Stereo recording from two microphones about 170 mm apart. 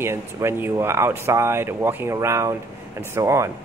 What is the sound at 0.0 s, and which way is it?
Speech, 15° right (ahead or behind).